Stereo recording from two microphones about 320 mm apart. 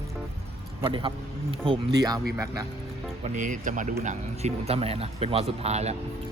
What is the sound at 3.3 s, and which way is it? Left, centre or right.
Speech, right.